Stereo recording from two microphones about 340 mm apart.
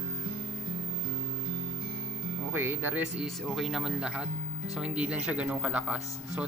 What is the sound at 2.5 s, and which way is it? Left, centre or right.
Speech, centre.